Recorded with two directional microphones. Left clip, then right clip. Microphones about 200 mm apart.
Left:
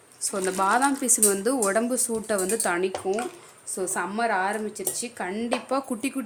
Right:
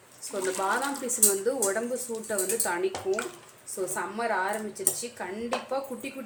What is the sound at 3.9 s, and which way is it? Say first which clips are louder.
Speech: left 4 dB; 55° left (ahead or behind).